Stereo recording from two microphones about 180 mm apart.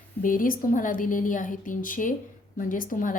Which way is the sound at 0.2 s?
50° left (ahead or behind).